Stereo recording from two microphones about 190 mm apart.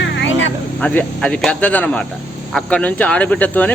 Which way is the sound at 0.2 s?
75° left (ahead or behind).